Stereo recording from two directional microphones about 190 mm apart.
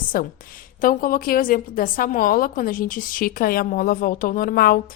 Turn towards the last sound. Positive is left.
turn(degrees=50)  # may be behind; listen again after turning